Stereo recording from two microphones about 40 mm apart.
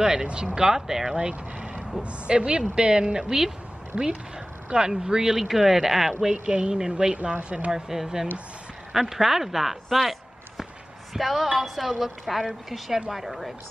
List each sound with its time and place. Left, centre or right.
0.0 s speech: centre
1.1 s speech: right
1.8 s a sound: centre
2.0 s speech: right; by 6.1 s centre
6.3 s speech: right
7.2 s speech: right
7.7 s a woman's voice: centre
11.1 s a woman's voice: centre